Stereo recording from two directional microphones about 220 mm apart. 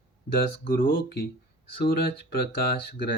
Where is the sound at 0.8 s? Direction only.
40° left (ahead or behind).